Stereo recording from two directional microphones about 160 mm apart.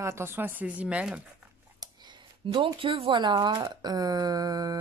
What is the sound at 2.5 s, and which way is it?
A woman's voice, 30° right (ahead or behind).